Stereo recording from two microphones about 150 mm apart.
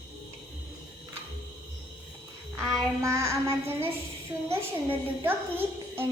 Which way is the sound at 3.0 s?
20° right (ahead or behind).